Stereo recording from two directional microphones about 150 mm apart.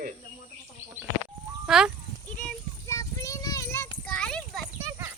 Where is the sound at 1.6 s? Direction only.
5° right (ahead or behind).